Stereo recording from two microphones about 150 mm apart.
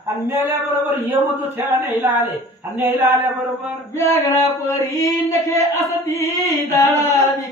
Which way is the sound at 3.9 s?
20° left (ahead or behind).